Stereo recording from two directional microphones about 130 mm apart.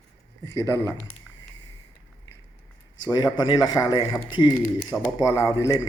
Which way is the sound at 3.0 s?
30° left (ahead or behind).